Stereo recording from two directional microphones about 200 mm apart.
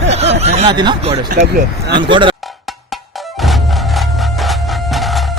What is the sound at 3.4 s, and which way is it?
Music, centre (ahead or behind).